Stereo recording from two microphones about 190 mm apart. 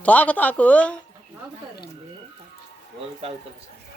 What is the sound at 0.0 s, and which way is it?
Speech, 10° left (ahead or behind).